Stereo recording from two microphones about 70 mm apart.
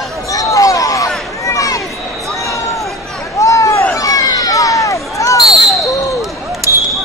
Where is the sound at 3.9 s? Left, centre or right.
Left.